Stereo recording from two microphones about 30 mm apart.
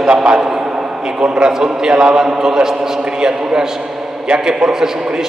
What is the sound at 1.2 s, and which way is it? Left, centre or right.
A man's voice, right.